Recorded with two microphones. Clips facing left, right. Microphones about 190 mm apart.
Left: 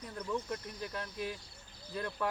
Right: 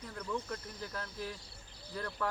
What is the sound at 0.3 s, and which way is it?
Speech, 15° left (ahead or behind).